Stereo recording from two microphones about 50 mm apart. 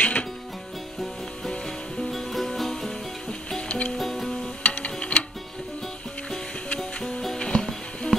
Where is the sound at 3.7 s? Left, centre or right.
Left.